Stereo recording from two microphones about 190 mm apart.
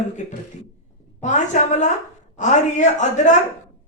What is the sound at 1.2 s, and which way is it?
Speech, 40° left (ahead or behind).